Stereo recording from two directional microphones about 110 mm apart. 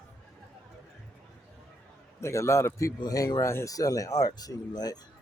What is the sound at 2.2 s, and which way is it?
A man's voice, 25° left (ahead or behind).